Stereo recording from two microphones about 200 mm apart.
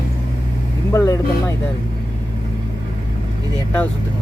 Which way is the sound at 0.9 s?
15° left (ahead or behind).